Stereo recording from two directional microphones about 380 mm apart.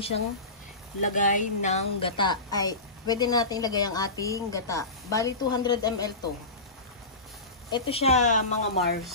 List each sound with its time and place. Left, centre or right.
1.0 s a woman's voice: centre
7.7 s a woman's voice: centre